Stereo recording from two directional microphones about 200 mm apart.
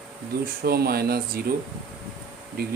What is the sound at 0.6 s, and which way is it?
Speech, 50° right (ahead or behind).